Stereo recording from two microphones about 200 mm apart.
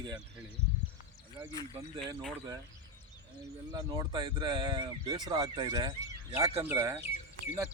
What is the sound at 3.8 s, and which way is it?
Speech, 25° right (ahead or behind).